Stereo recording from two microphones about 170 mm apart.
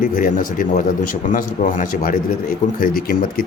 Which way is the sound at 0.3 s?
50° left (ahead or behind).